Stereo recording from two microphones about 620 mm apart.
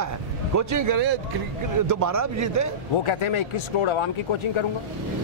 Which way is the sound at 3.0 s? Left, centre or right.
Left.